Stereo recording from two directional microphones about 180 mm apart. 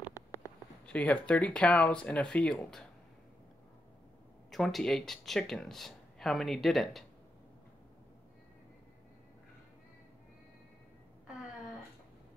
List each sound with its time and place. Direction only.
0.0 s a sound: 20° left (ahead or behind)
0.8 s speech: 5° left (ahead or behind)
4.5 s speech: centre (ahead or behind)